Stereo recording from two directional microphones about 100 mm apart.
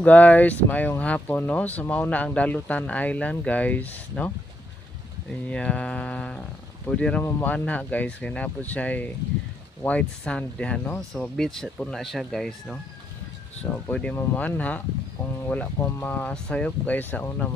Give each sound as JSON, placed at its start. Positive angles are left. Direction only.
{"t": 0.0, "sound": "speech", "side_deg": 15}
{"t": 5.5, "sound": "speech", "side_deg": 10}
{"t": 7.2, "sound": "speech", "side_deg": 25}
{"t": 7.5, "sound": "speech", "side_deg": 15}
{"t": 13.7, "sound": "speech", "side_deg": 15}